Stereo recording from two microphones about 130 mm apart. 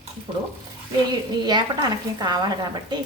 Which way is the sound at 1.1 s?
35° right (ahead or behind).